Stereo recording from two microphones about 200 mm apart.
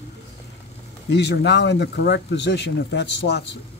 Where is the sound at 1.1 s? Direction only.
60° left (ahead or behind).